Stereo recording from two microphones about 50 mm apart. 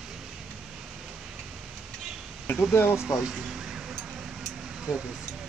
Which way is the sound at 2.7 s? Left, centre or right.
Left.